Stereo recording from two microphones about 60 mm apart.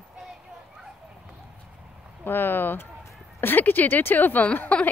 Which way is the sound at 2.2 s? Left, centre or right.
Left.